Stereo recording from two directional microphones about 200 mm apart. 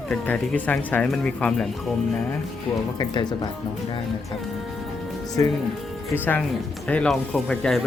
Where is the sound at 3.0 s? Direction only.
20° left (ahead or behind).